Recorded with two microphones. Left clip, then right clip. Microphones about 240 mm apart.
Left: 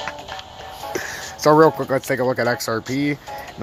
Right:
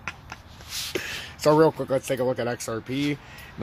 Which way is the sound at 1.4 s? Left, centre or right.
Centre.